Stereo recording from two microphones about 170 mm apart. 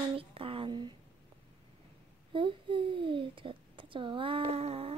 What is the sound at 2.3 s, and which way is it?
A child's voice, 30° right (ahead or behind).